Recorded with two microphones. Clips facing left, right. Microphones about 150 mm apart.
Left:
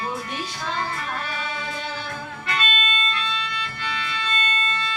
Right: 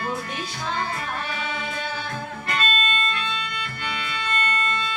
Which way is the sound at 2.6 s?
40° right (ahead or behind).